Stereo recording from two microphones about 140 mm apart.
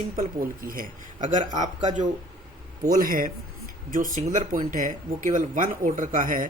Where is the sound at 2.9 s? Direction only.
80° right.